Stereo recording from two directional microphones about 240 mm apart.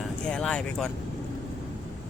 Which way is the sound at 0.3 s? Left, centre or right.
Centre.